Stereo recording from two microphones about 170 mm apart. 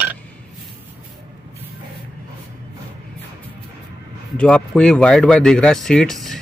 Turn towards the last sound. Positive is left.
turn(degrees=0)  # may be behind; listen again after turning